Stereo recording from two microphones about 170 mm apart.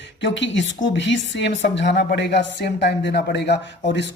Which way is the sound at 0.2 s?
90° left.